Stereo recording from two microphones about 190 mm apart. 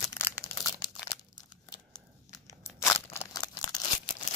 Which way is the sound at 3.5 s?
20° left (ahead or behind).